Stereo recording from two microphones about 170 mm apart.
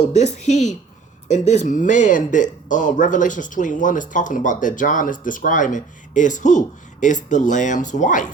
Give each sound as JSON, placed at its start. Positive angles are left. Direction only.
{"t": 0.1, "sound": "speech", "side_deg": 40}